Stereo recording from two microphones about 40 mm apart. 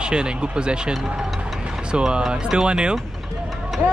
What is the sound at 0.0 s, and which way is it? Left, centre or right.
Speech, right.